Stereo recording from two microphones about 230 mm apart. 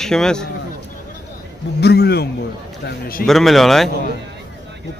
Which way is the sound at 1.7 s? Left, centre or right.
Left.